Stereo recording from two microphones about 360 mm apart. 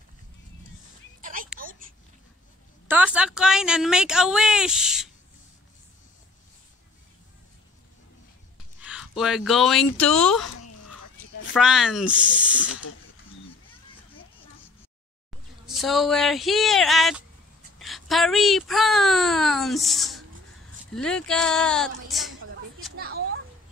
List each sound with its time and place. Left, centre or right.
1.2 s a sound: right
2.9 s a woman's voice: centre
8.7 s speech: centre
11.5 s speech: centre
15.6 s speech: centre
23.0 s a sound: right